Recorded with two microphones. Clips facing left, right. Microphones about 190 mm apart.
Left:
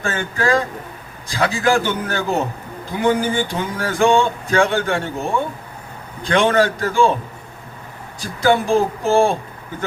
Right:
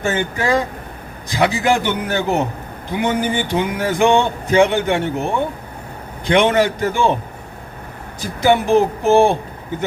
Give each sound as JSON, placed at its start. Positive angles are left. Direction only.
{"t": 0.0, "sound": "speech", "side_deg": -20}
{"t": 8.2, "sound": "speech", "side_deg": -20}